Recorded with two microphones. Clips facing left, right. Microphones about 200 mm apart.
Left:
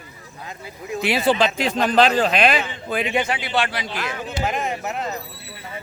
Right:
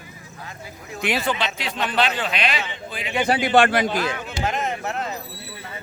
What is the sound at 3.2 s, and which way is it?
Speech, 40° right (ahead or behind).